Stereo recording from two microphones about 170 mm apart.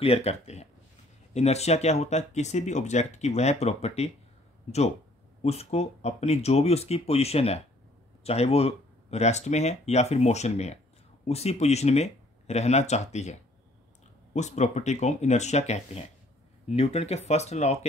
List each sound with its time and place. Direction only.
0.0 s speech: 35° left (ahead or behind)